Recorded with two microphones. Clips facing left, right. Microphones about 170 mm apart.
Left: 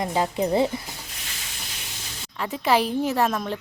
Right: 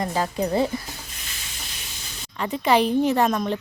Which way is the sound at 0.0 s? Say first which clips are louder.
Left 1 dB; 20° left (ahead or behind).